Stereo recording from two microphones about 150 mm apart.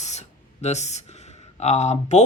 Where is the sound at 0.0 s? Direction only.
50° left (ahead or behind).